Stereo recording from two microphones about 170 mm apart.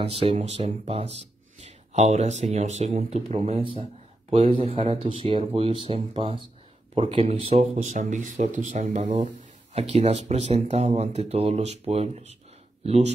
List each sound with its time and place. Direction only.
0.0 s speech: 35° right (ahead or behind)
7.7 s speech: 50° right (ahead or behind)